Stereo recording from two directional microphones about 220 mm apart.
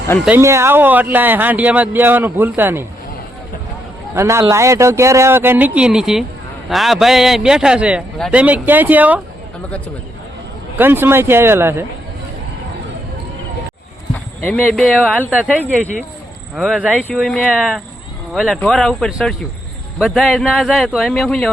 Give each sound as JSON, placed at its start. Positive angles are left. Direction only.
{"t": 0.3, "sound": "speech", "side_deg": -10}
{"t": 4.1, "sound": "a man's voice", "side_deg": -10}
{"t": 10.8, "sound": "speech", "side_deg": -10}
{"t": 14.4, "sound": "a man's voice", "side_deg": 5}
{"t": 15.6, "sound": "a man's voice", "side_deg": 5}